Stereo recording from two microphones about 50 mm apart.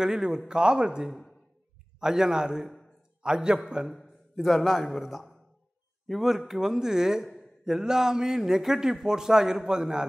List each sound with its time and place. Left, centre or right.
0.0 s a man's voice: centre
4.4 s a man's voice: centre